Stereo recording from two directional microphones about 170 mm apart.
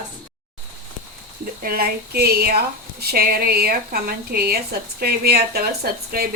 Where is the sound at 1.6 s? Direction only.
60° right (ahead or behind).